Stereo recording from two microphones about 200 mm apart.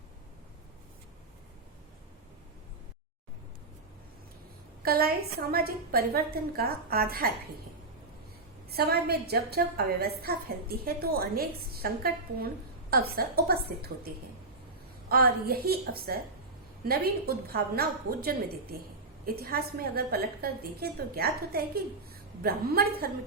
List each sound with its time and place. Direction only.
4.8 s a woman's voice: 50° right (ahead or behind)
8.7 s a woman's voice: 50° right (ahead or behind)
15.1 s a woman's voice: 50° right (ahead or behind)